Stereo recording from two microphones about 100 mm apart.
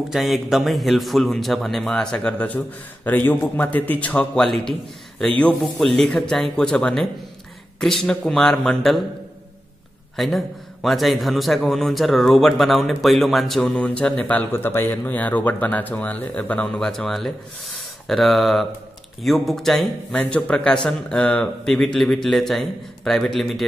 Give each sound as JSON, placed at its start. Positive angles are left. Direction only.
{"t": 0.1, "sound": "a man's voice", "side_deg": 0}
{"t": 6.0, "sound": "a man's voice", "side_deg": 5}
{"t": 10.1, "sound": "a man's voice", "side_deg": 0}
{"t": 14.5, "sound": "a man's voice", "side_deg": 20}